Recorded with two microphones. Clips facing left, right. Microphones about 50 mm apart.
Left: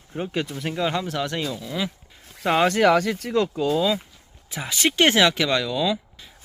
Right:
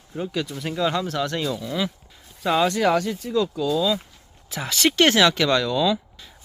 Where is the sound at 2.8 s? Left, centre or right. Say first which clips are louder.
Left 2 dB; left.